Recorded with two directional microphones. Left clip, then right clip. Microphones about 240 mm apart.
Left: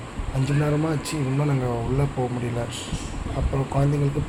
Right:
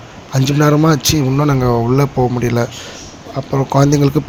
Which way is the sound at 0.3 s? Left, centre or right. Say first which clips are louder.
Right 12 dB; right.